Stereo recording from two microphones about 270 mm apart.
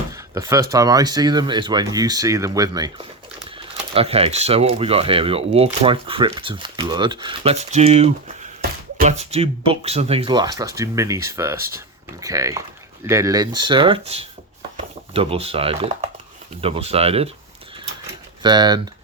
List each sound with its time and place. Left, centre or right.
0.1 s speech: centre
18.4 s speech: centre